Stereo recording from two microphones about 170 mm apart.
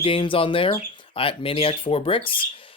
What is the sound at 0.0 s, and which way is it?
Speech, 30° left (ahead or behind).